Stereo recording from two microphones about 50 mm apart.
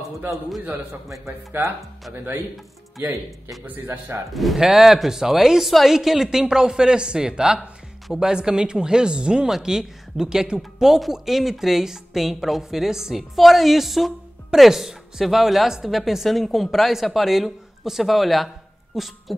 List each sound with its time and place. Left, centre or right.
1.0 s speech: right
1.5 s speech: right
3.6 s speech: right
4.3 s a woman's voice: centre